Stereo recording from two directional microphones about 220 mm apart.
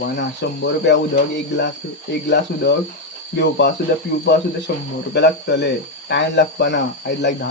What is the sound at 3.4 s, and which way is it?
Speech, 50° left (ahead or behind).